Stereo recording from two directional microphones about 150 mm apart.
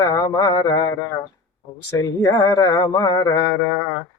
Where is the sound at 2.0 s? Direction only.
20° left (ahead or behind).